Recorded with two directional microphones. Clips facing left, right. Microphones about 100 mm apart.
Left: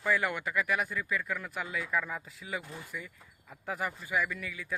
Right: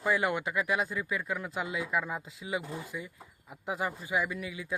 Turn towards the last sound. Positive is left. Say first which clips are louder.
# right 2 dB
turn(degrees=-20)  # may be behind; listen again after turning